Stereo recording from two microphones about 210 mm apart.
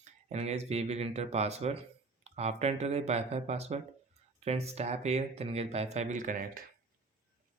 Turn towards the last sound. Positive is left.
turn(degrees=-35)  # may be behind; listen again after turning